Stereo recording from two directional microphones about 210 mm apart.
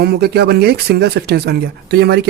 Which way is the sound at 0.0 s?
50° right (ahead or behind).